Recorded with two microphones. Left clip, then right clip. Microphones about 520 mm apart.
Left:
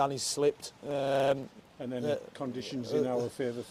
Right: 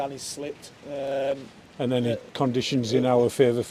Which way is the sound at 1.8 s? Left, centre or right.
Right.